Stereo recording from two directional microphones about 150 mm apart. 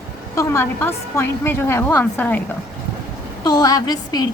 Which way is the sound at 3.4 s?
25° left (ahead or behind).